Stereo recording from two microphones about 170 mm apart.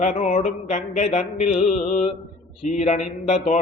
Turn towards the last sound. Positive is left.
turn(degrees=45)  # may be behind; listen again after turning